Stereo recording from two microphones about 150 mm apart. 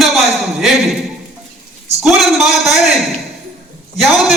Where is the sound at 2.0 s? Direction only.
Centre (ahead or behind).